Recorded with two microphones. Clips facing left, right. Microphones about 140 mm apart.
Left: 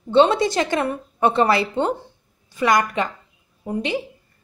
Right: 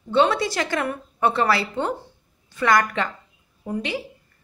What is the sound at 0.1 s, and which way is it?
A woman's voice, 25° left (ahead or behind).